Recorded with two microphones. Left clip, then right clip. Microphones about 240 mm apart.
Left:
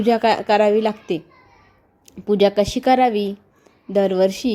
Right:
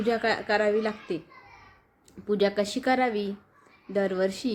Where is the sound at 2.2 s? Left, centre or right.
Left.